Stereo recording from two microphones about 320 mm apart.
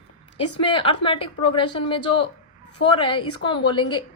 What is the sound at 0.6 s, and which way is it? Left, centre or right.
A woman's voice, centre.